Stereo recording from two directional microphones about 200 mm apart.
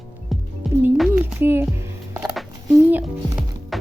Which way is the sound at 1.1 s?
10° right (ahead or behind).